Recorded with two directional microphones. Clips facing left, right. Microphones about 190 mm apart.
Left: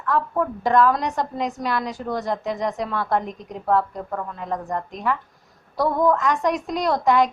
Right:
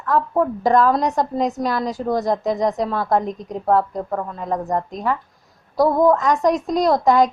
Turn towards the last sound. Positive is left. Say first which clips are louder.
# right 4 dB
turn(degrees=-35)  # may be behind; listen again after turning